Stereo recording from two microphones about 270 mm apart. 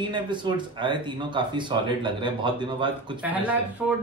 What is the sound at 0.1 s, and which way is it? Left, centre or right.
Speech, centre.